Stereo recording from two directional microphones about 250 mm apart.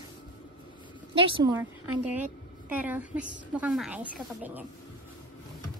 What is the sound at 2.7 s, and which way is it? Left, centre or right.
A woman's voice, centre.